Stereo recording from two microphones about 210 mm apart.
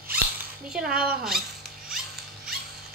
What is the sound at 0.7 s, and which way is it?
Speech, 5° right (ahead or behind).